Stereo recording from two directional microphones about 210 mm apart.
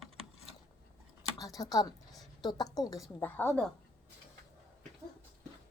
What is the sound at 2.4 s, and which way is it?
A woman's voice, 20° left (ahead or behind).